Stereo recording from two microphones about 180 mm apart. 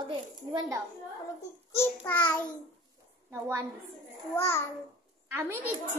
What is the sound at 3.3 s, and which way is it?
Speech, 15° right (ahead or behind).